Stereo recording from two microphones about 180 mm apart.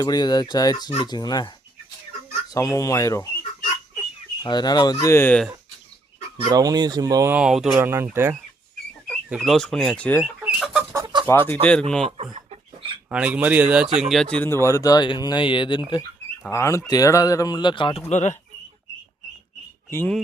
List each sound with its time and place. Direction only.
0.0 s speech: 20° left (ahead or behind)
4.4 s speech: 25° left (ahead or behind)
6.3 s speech: 20° right (ahead or behind)
7.3 s speech: 5° right (ahead or behind)
7.8 s speech: 15° right (ahead or behind)
9.0 s speech: centre (ahead or behind)
10.2 s chicken: 5° right (ahead or behind)
10.9 s chicken: 25° right (ahead or behind)
11.3 s speech: 10° left (ahead or behind)
12.0 s speech: 35° right (ahead or behind)
13.1 s speech: 5° right (ahead or behind); by 15.8 s 25° left (ahead or behind)
16.5 s speech: 15° left (ahead or behind)
18.1 s speech: 40° left (ahead or behind)
19.9 s speech: 10° left (ahead or behind)